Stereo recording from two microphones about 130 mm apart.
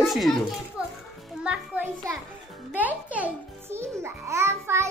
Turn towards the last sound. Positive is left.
turn(degrees=-20)  # may be behind; listen again after turning